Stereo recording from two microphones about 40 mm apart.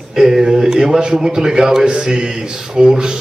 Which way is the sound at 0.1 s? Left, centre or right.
Centre.